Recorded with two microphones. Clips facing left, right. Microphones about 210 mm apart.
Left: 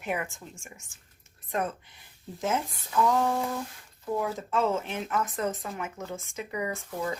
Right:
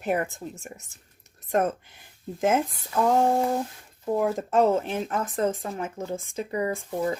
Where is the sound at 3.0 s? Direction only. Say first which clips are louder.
Right 5 dB; 45° right (ahead or behind).